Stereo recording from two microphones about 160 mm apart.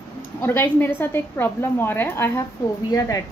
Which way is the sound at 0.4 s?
15° left (ahead or behind).